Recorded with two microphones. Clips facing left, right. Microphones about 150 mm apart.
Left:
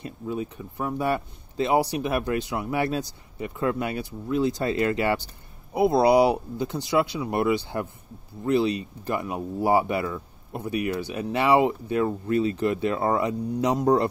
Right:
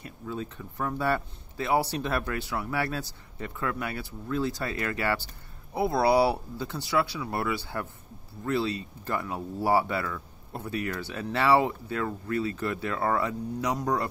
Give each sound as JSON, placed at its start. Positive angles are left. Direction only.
{"t": 0.0, "sound": "speech", "side_deg": 15}